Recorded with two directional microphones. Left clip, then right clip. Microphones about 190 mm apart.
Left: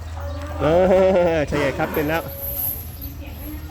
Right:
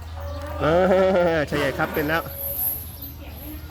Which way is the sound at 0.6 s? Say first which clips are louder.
Left 3 dB; 5° right (ahead or behind).